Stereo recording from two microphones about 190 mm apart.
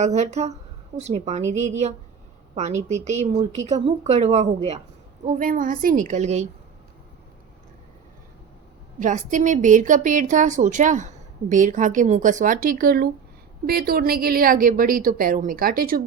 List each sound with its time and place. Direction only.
0.0 s a woman's voice: 35° right (ahead or behind)
9.0 s a woman's voice: 40° right (ahead or behind)